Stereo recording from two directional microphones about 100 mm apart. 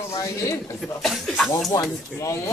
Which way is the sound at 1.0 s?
Centre (ahead or behind).